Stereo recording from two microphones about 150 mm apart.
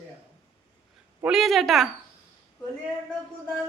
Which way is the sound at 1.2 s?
Centre (ahead or behind).